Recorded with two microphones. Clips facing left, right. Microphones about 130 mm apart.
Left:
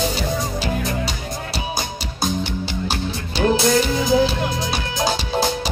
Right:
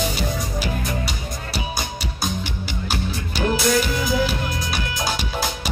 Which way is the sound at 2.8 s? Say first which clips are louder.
Left 2 dB; 25° left (ahead or behind).